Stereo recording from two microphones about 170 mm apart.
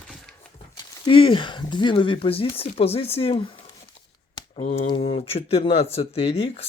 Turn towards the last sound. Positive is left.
turn(degrees=35)  # may be behind; listen again after turning